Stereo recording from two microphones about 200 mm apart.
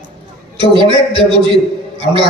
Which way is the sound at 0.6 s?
25° right (ahead or behind).